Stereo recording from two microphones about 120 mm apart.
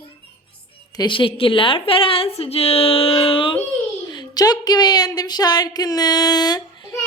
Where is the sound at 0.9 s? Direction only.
35° left (ahead or behind).